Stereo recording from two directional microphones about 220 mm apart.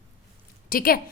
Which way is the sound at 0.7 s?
40° left (ahead or behind).